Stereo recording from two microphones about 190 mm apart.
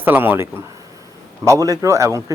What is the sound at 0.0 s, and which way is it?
A man's voice, 10° right (ahead or behind).